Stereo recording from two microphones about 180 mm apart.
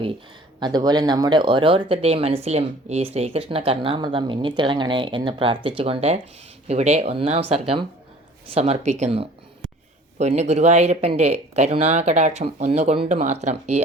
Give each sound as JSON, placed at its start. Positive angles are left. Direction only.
{"t": 0.6, "sound": "speech", "side_deg": -25}